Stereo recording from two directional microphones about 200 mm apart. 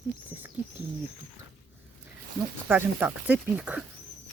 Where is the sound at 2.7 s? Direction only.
10° right (ahead or behind).